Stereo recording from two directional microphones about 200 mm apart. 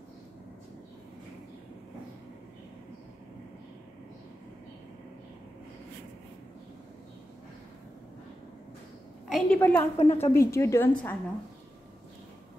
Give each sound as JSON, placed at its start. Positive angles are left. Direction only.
{"t": 9.3, "sound": "a woman's voice", "side_deg": 5}
{"t": 9.9, "sound": "a woman's voice", "side_deg": 30}
{"t": 10.4, "sound": "a woman's voice", "side_deg": 15}